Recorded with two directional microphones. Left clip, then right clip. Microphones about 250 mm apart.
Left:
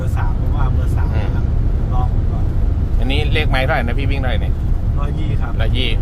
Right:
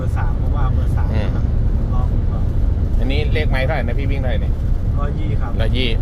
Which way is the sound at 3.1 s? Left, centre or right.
Centre.